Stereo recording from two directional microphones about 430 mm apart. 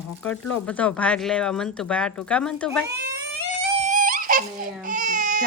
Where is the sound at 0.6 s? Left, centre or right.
Centre.